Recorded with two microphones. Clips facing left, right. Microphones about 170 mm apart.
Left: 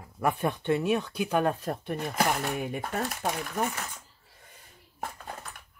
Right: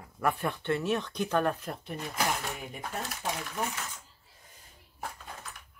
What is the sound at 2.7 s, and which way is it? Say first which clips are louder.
Speech: left 6 dB; 65° left (ahead or behind).